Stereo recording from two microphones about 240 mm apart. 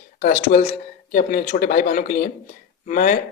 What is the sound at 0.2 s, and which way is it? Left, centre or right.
Speech, left.